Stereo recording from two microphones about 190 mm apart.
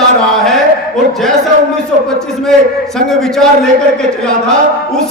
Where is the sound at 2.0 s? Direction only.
Centre (ahead or behind).